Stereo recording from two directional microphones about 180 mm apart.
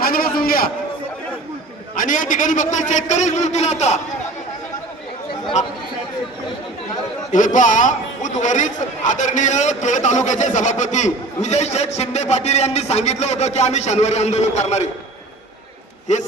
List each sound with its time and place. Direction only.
0.0 s a sound: 55° left (ahead or behind)
2.0 s a man's voice: 50° left (ahead or behind)
7.3 s a man's voice: 45° left (ahead or behind)
16.1 s a man's voice: 40° left (ahead or behind)